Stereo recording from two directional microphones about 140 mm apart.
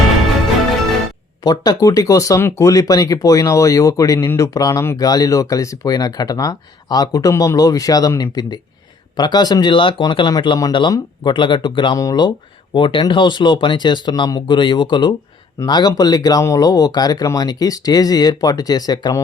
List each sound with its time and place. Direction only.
1.5 s speech: 25° left (ahead or behind)